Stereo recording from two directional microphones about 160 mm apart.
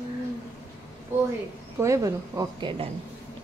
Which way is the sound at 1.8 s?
20° right (ahead or behind).